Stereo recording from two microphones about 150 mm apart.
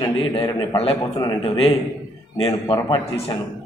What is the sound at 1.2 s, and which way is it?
Speech, 25° left (ahead or behind).